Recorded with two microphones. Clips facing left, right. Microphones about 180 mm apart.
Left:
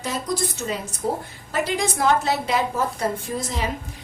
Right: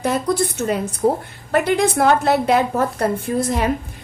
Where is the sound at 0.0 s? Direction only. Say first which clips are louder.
Right 7 dB; 60° right (ahead or behind).